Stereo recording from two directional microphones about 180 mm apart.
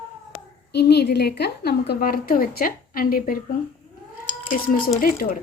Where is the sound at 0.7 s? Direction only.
65° left (ahead or behind).